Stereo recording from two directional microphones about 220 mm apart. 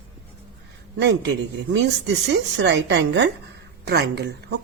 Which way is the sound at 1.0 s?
55° right (ahead or behind).